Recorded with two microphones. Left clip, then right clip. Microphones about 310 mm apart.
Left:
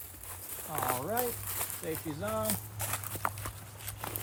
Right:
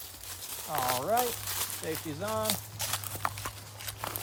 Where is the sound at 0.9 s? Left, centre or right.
Centre.